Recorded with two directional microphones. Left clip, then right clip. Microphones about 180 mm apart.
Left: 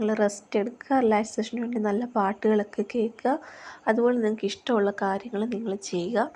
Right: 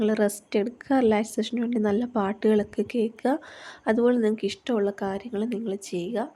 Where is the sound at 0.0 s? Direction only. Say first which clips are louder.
Right 1 dB; 25° right (ahead or behind).